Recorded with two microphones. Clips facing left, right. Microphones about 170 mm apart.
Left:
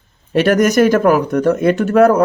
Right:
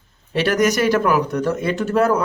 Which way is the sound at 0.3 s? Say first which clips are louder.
Left 6 dB; 50° left (ahead or behind).